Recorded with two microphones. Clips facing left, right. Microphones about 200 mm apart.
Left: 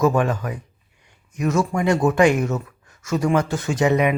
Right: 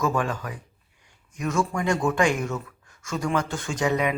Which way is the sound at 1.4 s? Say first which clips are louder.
Left 5 dB; 40° left (ahead or behind).